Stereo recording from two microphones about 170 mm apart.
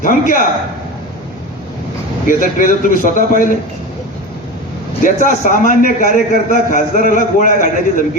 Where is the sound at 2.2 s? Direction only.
50° left (ahead or behind).